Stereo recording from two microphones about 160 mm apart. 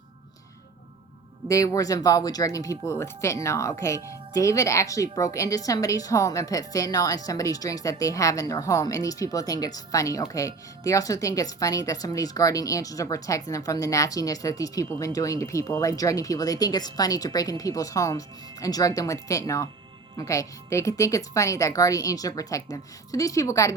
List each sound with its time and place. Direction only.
1.5 s a woman's voice: 20° left (ahead or behind)